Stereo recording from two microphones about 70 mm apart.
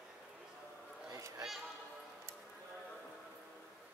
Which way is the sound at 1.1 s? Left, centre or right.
Right.